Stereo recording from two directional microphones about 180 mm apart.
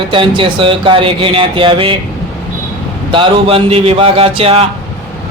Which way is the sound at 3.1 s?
30° right (ahead or behind).